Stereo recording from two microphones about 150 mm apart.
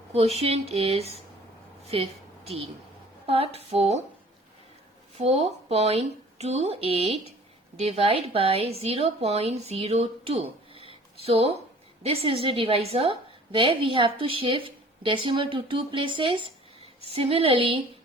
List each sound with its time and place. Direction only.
0.1 s a woman's voice: 45° right (ahead or behind)
5.1 s a woman's voice: 45° right (ahead or behind)